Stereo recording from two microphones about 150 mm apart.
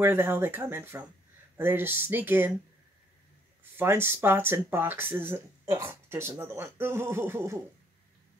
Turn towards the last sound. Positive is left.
turn(degrees=-15)  # may be behind; listen again after turning